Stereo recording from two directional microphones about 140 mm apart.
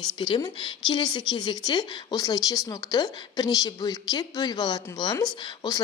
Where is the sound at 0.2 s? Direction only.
35° left (ahead or behind).